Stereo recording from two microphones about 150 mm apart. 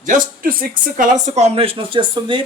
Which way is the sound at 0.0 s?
65° right (ahead or behind).